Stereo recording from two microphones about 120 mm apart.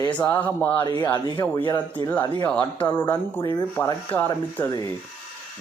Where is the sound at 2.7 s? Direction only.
40° left (ahead or behind).